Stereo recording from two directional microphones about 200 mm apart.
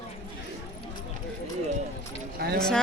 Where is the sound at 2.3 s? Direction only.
50° right (ahead or behind).